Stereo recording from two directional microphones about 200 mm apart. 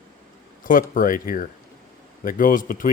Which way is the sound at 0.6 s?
45° left (ahead or behind).